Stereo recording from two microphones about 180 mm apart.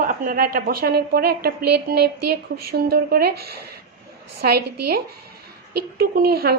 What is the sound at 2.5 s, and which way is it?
A woman's voice, 60° right (ahead or behind).